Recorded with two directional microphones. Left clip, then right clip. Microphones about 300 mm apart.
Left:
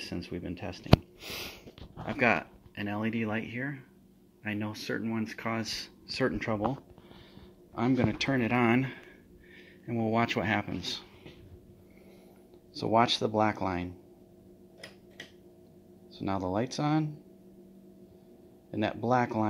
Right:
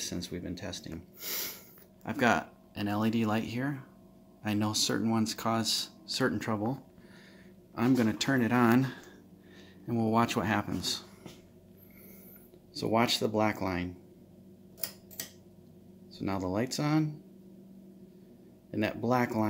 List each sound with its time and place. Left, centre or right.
0.0 s speech: centre
7.7 s speech: centre
12.7 s speech: centre
16.1 s speech: centre
18.7 s speech: centre